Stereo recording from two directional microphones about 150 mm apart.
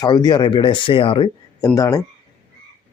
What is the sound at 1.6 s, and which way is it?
Speech, 20° left (ahead or behind).